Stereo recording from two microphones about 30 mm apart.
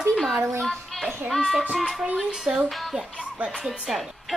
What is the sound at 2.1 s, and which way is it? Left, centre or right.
Speech, right.